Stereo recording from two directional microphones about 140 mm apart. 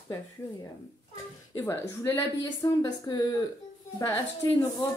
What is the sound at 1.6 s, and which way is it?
Speech, 20° left (ahead or behind).